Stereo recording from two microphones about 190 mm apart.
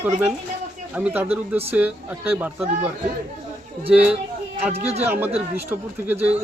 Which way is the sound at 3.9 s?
5° right (ahead or behind).